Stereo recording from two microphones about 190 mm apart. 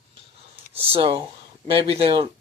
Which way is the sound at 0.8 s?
30° right (ahead or behind).